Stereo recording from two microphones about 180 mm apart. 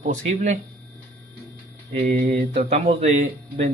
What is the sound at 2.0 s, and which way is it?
A man's voice, 50° right (ahead or behind).